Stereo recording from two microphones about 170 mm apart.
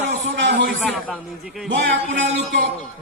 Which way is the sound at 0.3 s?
90° right.